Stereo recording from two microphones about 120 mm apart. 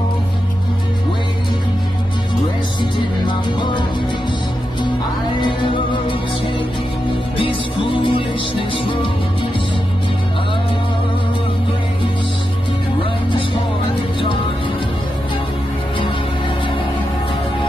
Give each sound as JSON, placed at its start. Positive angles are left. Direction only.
{"t": 2.8, "sound": "music", "side_deg": 45}
{"t": 7.3, "sound": "music", "side_deg": 45}